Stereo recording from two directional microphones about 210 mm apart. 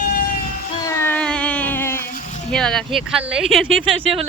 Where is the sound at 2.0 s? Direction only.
40° left (ahead or behind).